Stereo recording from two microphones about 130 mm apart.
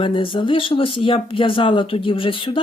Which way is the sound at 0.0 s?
40° left (ahead or behind).